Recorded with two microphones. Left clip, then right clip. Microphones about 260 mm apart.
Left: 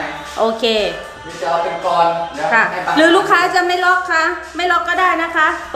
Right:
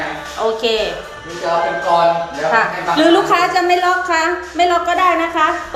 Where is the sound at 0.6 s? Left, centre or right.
Centre.